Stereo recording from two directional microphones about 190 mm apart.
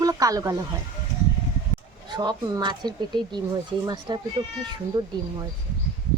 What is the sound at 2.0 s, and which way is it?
Speech, 20° right (ahead or behind).